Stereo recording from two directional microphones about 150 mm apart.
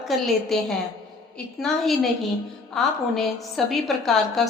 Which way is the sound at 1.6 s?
Centre (ahead or behind).